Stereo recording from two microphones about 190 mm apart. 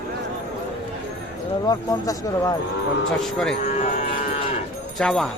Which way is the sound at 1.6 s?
20° left (ahead or behind).